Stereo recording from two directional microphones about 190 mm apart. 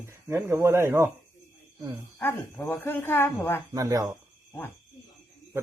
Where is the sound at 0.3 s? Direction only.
15° right (ahead or behind).